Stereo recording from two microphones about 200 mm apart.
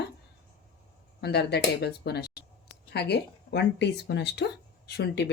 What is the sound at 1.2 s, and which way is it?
Speech, 55° left (ahead or behind).